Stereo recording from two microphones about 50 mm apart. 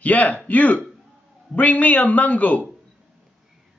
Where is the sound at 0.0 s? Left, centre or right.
Left.